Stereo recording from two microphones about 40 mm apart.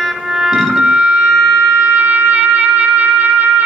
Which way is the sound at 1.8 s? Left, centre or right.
Right.